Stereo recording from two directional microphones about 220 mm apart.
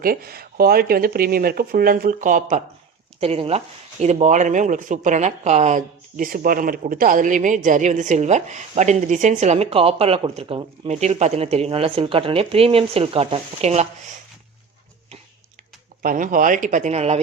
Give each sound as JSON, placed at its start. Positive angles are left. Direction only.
{"t": 0.0, "sound": "speech", "side_deg": -40}
{"t": 16.0, "sound": "speech", "side_deg": -35}